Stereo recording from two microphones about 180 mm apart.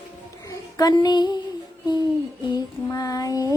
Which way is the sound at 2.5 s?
20° left (ahead or behind).